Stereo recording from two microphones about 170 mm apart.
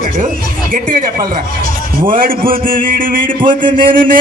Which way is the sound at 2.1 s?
55° right (ahead or behind).